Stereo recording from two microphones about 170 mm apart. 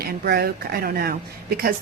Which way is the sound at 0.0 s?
65° right (ahead or behind).